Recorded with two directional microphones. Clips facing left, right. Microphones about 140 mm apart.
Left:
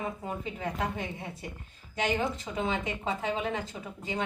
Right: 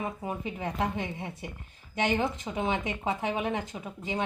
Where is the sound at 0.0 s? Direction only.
15° right (ahead or behind).